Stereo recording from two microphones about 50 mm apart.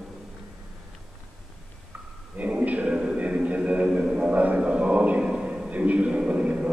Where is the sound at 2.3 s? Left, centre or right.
Right.